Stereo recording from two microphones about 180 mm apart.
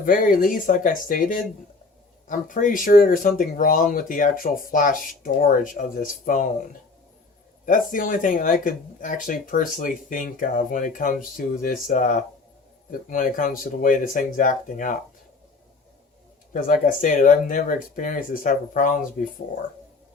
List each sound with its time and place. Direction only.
0.0 s speech: 50° left (ahead or behind)
7.6 s speech: 45° left (ahead or behind)
16.5 s speech: 45° left (ahead or behind)